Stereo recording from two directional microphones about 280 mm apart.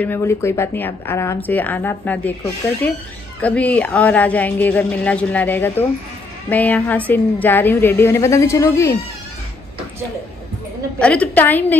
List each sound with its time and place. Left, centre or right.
0.0 s a woman's voice: centre
11.0 s speech: centre